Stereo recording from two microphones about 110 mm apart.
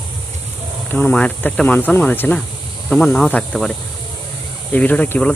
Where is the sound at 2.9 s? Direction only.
5° left (ahead or behind).